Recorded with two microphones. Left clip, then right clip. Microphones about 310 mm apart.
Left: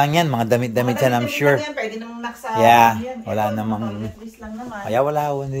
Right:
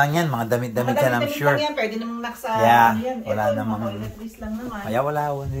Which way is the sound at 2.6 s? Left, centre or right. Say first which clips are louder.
Left 3 dB; left.